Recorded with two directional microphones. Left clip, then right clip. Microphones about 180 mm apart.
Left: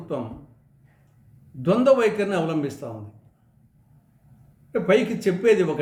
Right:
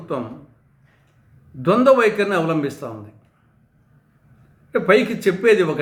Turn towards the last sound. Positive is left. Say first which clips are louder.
# right 4 dB
turn(degrees=-40)  # may be behind; listen again after turning